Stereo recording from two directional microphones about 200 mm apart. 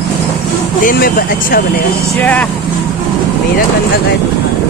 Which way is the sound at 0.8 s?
45° left (ahead or behind).